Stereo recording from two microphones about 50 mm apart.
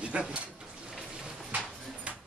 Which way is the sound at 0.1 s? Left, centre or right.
Right.